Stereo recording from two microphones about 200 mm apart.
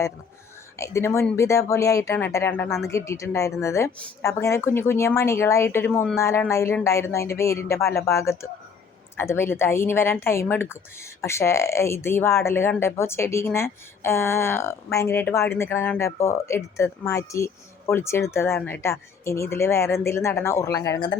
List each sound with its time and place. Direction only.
0.8 s speech: 15° left (ahead or behind)